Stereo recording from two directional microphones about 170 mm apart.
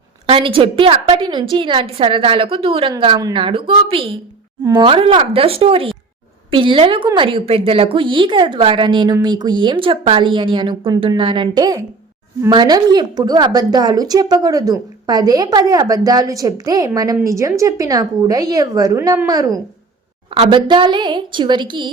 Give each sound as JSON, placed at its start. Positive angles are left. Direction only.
{"t": 0.3, "sound": "a woman's voice", "side_deg": -35}
{"t": 20.3, "sound": "a woman's voice", "side_deg": -35}